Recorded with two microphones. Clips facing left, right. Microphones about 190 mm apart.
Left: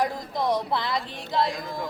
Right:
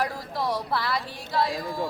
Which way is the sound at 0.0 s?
20° left (ahead or behind).